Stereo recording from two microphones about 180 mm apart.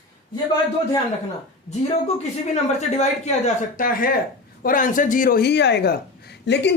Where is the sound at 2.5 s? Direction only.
40° left (ahead or behind).